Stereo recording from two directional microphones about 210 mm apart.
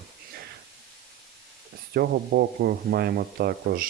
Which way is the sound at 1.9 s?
50° right (ahead or behind).